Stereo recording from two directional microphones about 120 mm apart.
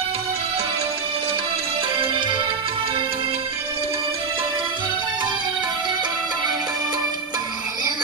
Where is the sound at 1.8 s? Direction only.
45° right (ahead or behind).